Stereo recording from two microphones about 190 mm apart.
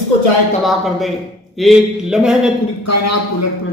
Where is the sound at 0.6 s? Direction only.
Centre (ahead or behind).